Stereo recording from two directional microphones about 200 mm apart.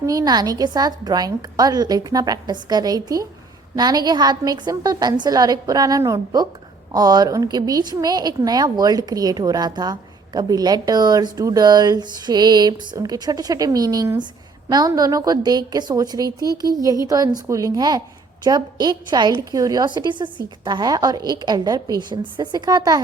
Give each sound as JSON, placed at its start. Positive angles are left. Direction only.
{"t": 0.0, "sound": "a woman's voice", "side_deg": -15}